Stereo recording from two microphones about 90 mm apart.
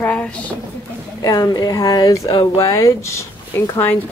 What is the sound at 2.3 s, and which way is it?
Speech, 60° left (ahead or behind).